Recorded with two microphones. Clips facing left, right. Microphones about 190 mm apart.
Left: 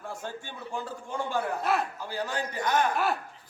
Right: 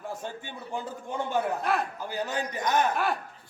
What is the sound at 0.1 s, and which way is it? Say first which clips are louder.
Speech: right 1 dB; 20° right (ahead or behind).